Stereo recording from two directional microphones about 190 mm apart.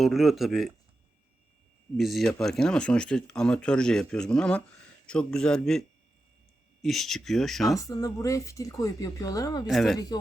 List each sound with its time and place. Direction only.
0.0 s speech: centre (ahead or behind)
2.0 s speech: centre (ahead or behind)
6.8 s speech: centre (ahead or behind)
7.8 s speech: 15° left (ahead or behind)
9.6 s speech: centre (ahead or behind)